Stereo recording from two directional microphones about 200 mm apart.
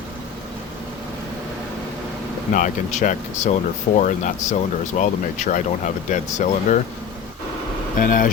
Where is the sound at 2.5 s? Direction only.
40° left (ahead or behind).